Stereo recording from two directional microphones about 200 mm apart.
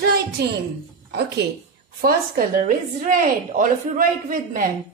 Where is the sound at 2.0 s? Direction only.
45° right (ahead or behind).